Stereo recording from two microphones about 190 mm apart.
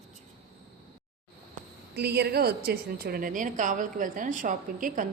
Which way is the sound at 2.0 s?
60° right (ahead or behind).